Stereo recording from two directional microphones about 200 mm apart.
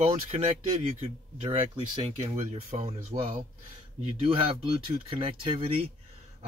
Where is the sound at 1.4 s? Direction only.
25° right (ahead or behind).